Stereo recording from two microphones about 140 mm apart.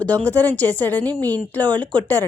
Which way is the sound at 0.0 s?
10° left (ahead or behind).